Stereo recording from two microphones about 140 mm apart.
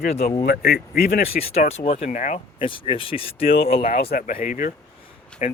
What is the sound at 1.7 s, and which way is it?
Speech, 50° left (ahead or behind).